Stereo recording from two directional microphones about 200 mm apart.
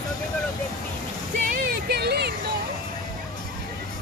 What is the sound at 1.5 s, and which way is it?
Vehicle, 50° right (ahead or behind).